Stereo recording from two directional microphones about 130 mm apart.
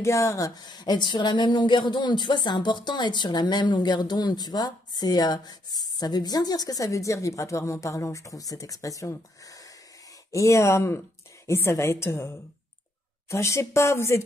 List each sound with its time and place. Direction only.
0.0 s a woman's voice: 25° left (ahead or behind)